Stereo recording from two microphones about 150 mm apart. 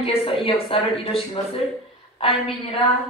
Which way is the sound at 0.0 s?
40° left (ahead or behind).